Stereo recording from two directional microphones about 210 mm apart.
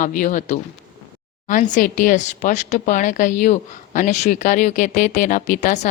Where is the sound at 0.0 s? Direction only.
40° left (ahead or behind).